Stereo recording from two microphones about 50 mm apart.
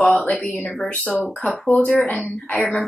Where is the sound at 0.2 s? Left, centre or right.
Centre.